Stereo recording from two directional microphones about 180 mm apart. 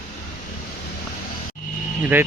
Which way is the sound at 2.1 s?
10° right (ahead or behind).